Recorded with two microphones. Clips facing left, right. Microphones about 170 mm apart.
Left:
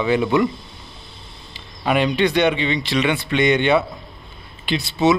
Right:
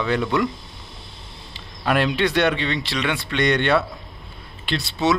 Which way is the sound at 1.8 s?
Centre (ahead or behind).